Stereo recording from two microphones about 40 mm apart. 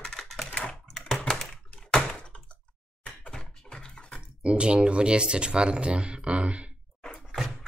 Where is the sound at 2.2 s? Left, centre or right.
Left.